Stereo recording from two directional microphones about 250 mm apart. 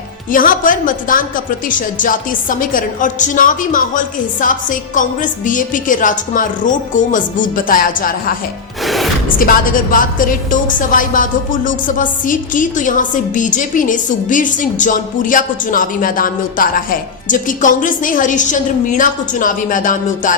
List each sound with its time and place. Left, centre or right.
0.3 s a woman's voice: left
8.8 s music: centre
9.4 s a woman's voice: left